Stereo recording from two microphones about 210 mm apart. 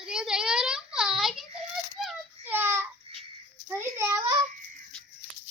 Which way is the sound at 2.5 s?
10° right (ahead or behind).